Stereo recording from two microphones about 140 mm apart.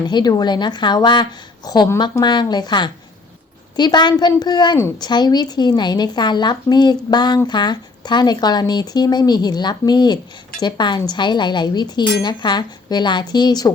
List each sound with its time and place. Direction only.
0.0 s speech: 30° left (ahead or behind)